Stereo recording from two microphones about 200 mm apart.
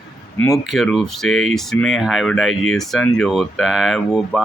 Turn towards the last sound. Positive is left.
turn(degrees=0)  # may be behind; listen again after turning